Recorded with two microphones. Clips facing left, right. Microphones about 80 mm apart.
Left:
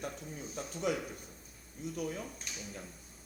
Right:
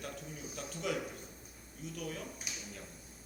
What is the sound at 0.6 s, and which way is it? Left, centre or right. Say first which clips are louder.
A man's voice: left 3 dB; left.